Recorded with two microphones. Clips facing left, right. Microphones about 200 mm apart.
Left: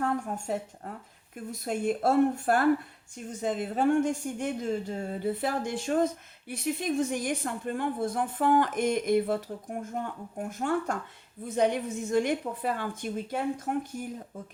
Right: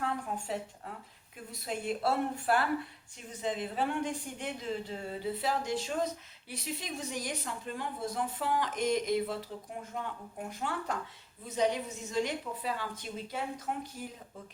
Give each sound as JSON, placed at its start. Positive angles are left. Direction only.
{"t": 0.0, "sound": "speech", "side_deg": 45}